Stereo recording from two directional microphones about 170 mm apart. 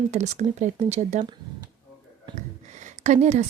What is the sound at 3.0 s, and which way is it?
Speech, 45° right (ahead or behind).